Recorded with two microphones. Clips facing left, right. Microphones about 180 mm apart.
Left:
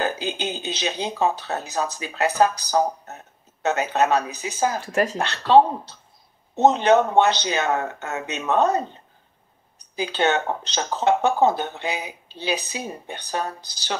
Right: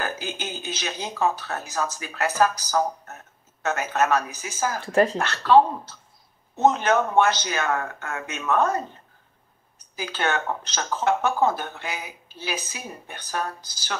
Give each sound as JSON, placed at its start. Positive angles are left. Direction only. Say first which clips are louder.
{"t": 0.0, "sound": "speech", "louder": "left 5 dB", "side_deg": 20}
{"t": 4.8, "sound": "speech", "louder": "right 3 dB", "side_deg": -30}
{"t": 5.2, "sound": "speech", "louder": "left 6 dB", "side_deg": 20}